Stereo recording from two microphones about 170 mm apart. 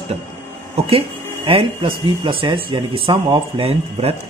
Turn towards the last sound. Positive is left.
turn(degrees=-35)  # may be behind; listen again after turning